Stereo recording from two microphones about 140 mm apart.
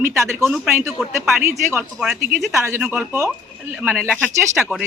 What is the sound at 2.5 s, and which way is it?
A man's voice, 20° right (ahead or behind).